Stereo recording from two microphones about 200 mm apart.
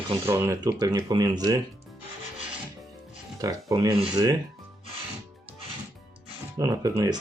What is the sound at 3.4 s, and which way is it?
Speech, 15° right (ahead or behind).